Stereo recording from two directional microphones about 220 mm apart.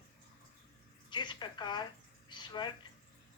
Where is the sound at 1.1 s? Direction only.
20° left (ahead or behind).